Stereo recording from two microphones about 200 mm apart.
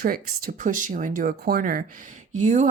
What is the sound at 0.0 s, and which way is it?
Speech, 45° right (ahead or behind).